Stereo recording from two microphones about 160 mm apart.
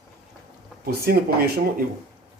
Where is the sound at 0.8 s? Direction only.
70° right (ahead or behind).